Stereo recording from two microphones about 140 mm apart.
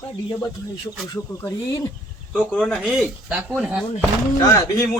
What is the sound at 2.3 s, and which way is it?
Speech, 5° left (ahead or behind).